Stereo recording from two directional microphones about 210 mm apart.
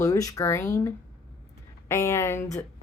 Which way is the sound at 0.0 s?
15° left (ahead or behind).